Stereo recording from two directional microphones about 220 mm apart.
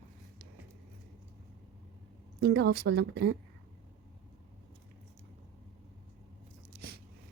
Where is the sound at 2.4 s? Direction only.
50° right (ahead or behind).